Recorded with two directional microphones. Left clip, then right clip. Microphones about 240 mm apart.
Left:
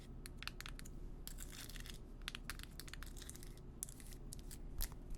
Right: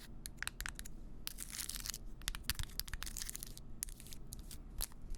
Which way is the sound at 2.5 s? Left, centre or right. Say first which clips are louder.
Right 7 dB; right.